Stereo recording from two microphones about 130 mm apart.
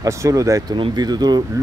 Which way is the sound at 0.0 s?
25° right (ahead or behind).